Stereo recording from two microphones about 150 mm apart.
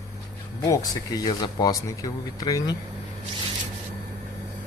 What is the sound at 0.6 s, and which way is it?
Speech, 25° left (ahead or behind).